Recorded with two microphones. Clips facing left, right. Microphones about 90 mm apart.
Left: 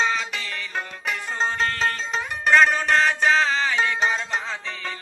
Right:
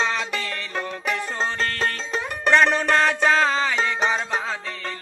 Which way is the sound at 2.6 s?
60° right (ahead or behind).